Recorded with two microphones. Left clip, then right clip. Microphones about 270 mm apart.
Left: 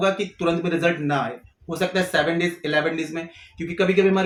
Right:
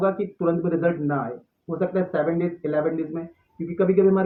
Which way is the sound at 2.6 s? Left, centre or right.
Left.